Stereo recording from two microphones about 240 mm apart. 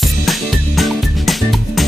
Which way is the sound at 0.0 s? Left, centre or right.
Centre.